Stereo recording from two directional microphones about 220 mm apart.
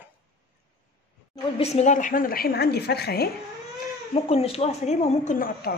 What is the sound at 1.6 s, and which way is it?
A woman's voice, 30° left (ahead or behind).